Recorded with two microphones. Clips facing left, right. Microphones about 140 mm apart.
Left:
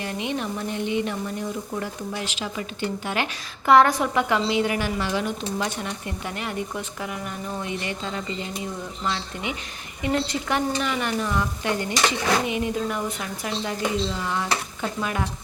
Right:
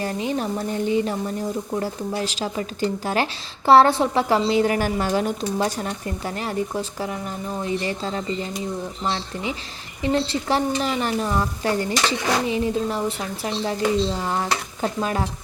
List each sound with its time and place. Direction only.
0.0 s a woman's voice: 35° right (ahead or behind)